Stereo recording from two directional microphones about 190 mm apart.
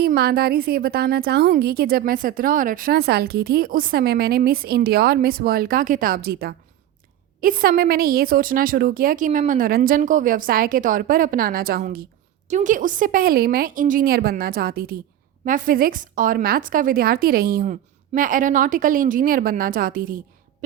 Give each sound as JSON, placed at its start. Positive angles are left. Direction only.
{"t": 0.0, "sound": "a woman's voice", "side_deg": -55}